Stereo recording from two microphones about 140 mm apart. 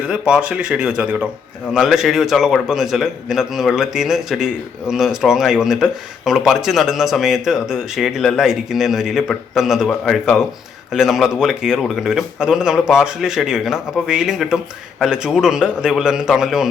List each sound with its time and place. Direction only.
0.1 s a man's voice: 5° right (ahead or behind)